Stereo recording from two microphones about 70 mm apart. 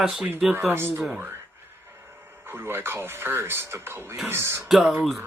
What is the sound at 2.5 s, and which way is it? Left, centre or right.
Speech, right.